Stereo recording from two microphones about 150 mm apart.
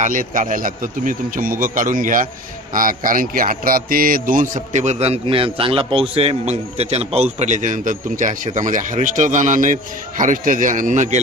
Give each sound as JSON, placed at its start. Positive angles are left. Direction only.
{"t": 0.0, "sound": "a man's voice", "side_deg": -60}